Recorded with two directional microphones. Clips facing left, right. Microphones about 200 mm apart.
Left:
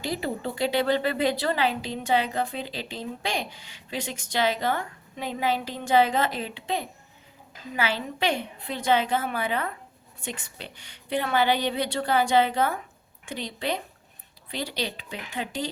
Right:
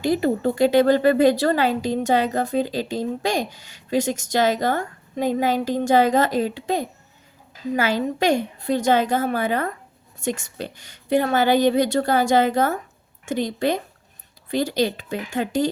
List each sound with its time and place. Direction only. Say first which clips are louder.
0.0 s speech: right 10 dB; 50° right (ahead or behind)